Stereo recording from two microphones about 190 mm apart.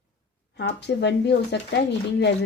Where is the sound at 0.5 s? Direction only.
60° left (ahead or behind).